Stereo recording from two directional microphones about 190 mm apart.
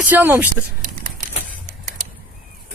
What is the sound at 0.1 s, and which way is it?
Speech, 10° right (ahead or behind).